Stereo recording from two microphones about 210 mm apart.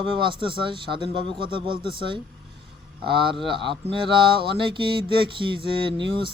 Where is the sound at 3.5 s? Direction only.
25° right (ahead or behind).